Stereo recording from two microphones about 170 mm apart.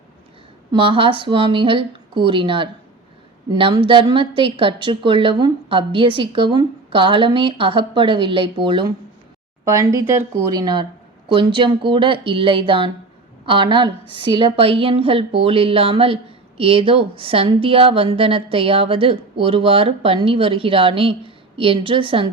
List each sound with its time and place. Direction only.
0.7 s a woman's voice: 30° right (ahead or behind)
9.6 s a woman's voice: 20° right (ahead or behind)